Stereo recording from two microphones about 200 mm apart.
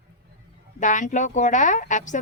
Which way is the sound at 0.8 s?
40° left (ahead or behind).